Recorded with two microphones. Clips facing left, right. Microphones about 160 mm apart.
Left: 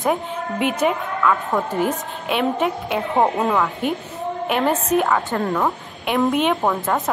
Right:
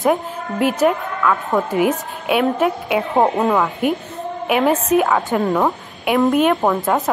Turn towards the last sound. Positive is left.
turn(degrees=0)  # may be behind; listen again after turning